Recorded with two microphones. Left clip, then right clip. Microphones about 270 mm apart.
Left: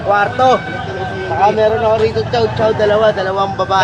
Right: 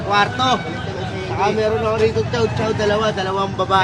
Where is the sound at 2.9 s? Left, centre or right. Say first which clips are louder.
Left 7 dB; right.